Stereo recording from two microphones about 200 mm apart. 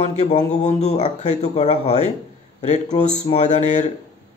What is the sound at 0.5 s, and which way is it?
A man's voice, 35° left (ahead or behind).